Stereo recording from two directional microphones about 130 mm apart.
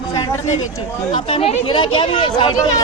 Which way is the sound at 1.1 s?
45° left (ahead or behind).